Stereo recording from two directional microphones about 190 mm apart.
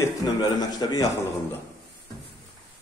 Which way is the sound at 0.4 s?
20° left (ahead or behind).